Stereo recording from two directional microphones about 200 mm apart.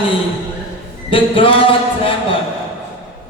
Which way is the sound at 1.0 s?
25° left (ahead or behind).